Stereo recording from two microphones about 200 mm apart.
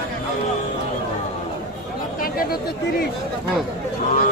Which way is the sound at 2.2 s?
45° left (ahead or behind).